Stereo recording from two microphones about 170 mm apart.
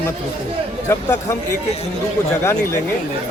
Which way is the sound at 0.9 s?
20° left (ahead or behind).